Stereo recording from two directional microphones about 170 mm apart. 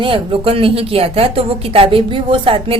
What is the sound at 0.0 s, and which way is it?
A woman's voice, 30° right (ahead or behind).